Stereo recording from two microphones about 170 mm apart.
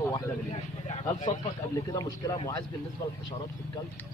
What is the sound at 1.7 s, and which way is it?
Speech, 20° left (ahead or behind).